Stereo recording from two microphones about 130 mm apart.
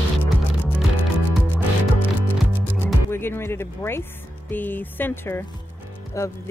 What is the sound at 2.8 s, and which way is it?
Music, 15° left (ahead or behind).